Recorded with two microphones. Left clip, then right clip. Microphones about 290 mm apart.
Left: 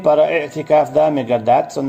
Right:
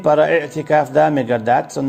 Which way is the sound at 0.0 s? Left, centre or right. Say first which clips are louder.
Even; right.